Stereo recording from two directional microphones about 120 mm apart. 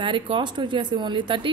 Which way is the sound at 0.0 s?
45° right (ahead or behind).